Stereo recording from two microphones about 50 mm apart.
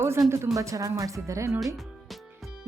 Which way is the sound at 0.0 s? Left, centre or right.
Right.